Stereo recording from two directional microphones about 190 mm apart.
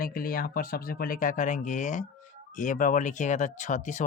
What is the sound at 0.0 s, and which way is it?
Speech, 50° left (ahead or behind).